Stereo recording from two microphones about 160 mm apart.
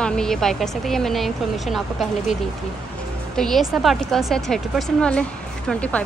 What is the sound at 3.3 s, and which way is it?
A woman's voice, centre (ahead or behind).